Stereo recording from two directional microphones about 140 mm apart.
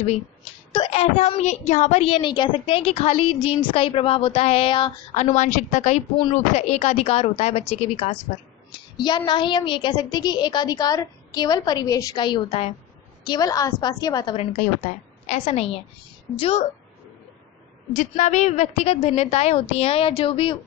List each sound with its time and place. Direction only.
0.7 s a woman's voice: 45° left (ahead or behind)
5.1 s a woman's voice: 55° left (ahead or behind)
8.9 s a woman's voice: 30° left (ahead or behind)
13.2 s a woman's voice: 30° left (ahead or behind)
14.3 s a woman's voice: 50° left (ahead or behind)
14.9 s a woman's voice: 70° left (ahead or behind)
15.2 s a woman's voice: 50° left (ahead or behind)
17.9 s a woman's voice: 60° left (ahead or behind); by 20.5 s 40° left (ahead or behind)